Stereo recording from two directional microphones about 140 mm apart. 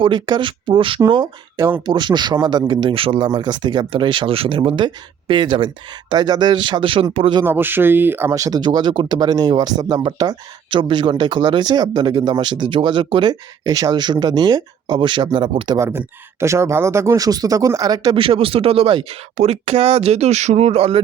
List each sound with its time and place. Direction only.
0.0 s speech: 35° right (ahead or behind)
1.5 s speech: 20° right (ahead or behind)
1.8 s speech: 30° right (ahead or behind)
7.4 s speech: 15° right (ahead or behind); by 15.8 s 35° right (ahead or behind)
15.8 s speech: 15° right (ahead or behind); by 21.0 s 45° right (ahead or behind)